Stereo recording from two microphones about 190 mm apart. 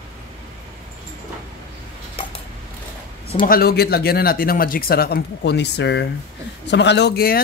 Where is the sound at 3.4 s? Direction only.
55° left (ahead or behind).